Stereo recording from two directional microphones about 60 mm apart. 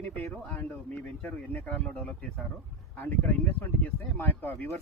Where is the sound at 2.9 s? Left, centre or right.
Left.